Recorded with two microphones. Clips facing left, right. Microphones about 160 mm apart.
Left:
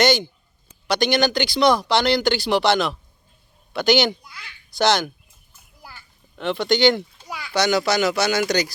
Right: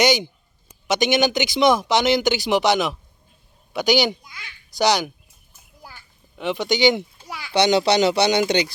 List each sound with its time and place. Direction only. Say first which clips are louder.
0.0 s speech: even; 15° right (ahead or behind)
5.9 s a sound: even; 15° right (ahead or behind)
7.5 s speech: right 3 dB; 25° right (ahead or behind)